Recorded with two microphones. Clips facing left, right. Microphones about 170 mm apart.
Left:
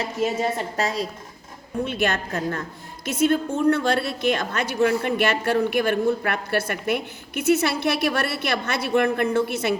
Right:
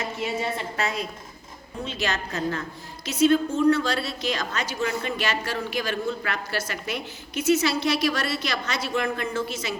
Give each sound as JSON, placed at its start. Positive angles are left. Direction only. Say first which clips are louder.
{"t": 0.0, "sound": "a woman's voice", "louder": "left 5 dB", "side_deg": 40}
{"t": 1.8, "sound": "a woman's voice", "louder": "left 5 dB", "side_deg": 55}